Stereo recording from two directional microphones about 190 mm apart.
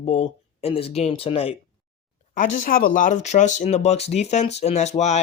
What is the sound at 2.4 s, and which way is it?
Speech, 40° left (ahead or behind).